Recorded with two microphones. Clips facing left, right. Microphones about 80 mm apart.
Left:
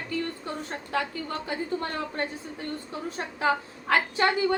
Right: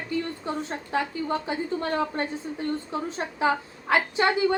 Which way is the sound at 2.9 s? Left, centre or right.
Right.